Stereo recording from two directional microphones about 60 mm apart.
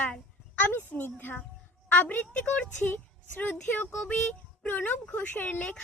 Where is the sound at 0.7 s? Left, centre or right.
Left.